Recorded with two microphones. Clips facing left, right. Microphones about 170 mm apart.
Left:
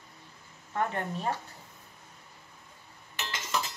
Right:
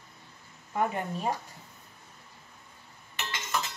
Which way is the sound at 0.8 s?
10° right (ahead or behind).